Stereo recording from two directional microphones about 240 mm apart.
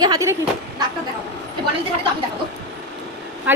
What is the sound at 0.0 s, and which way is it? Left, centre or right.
Speech, centre.